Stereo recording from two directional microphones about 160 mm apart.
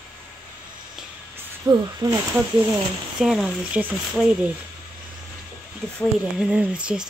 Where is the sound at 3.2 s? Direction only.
5° right (ahead or behind).